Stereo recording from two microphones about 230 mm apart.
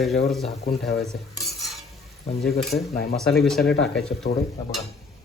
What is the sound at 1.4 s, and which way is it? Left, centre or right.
Stir, centre.